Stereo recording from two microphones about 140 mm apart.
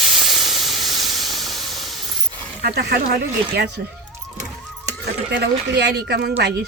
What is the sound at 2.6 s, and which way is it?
Speech, 90° right.